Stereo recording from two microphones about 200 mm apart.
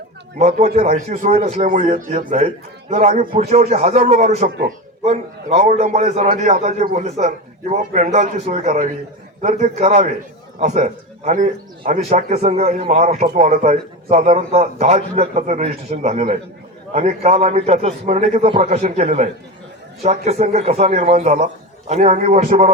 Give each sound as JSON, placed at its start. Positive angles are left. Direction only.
{"t": 0.3, "sound": "a man's voice", "side_deg": -35}